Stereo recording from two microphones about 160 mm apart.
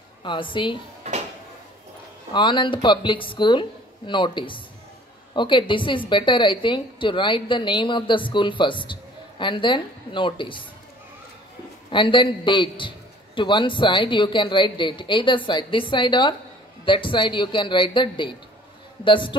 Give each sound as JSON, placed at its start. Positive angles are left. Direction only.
{"t": 0.2, "sound": "a man's voice", "side_deg": 30}
{"t": 1.0, "sound": "a sound", "side_deg": -40}
{"t": 2.3, "sound": "a man's voice", "side_deg": 30}
{"t": 11.9, "sound": "a man's voice", "side_deg": 30}